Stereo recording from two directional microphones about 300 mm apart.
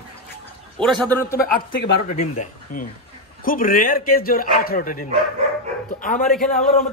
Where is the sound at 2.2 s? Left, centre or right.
Left.